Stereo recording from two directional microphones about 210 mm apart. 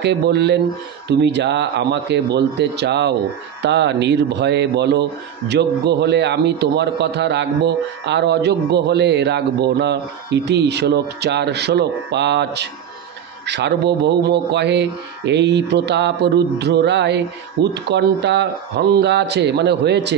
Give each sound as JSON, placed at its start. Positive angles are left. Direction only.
{"t": 0.0, "sound": "a man's voice", "side_deg": -55}